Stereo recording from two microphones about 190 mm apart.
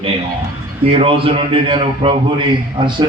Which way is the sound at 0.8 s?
30° right (ahead or behind).